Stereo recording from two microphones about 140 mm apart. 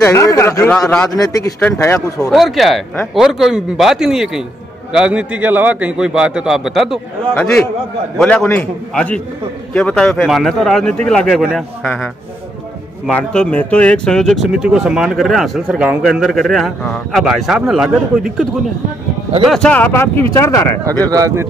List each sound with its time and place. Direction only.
0.0 s speech: 20° left (ahead or behind)
1.1 s speech: 25° left (ahead or behind)
2.3 s a man's voice: centre (ahead or behind)
7.3 s a man's voice: 10° left (ahead or behind)
13.1 s speech: 5° left (ahead or behind)
19.5 s a man's voice: 10° left (ahead or behind)
21.1 s speech: 25° right (ahead or behind)